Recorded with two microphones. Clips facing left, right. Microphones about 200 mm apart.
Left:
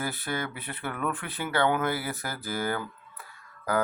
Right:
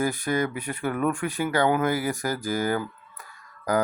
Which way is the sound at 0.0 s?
15° right (ahead or behind).